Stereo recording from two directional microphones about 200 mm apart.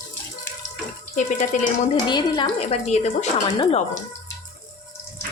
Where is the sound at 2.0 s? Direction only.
20° left (ahead or behind).